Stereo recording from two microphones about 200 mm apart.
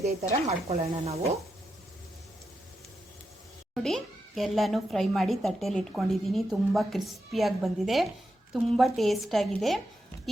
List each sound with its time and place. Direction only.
0.0 s speech: 35° right (ahead or behind)
3.8 s a child's voice: centre (ahead or behind)